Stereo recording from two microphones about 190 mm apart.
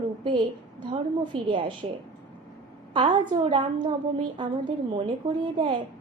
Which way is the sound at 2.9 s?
25° right (ahead or behind).